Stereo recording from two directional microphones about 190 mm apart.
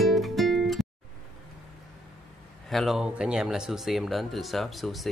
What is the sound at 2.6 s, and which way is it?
Speech, centre (ahead or behind).